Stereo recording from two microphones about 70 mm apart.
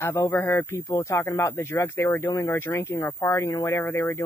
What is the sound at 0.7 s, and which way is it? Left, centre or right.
Speech, left.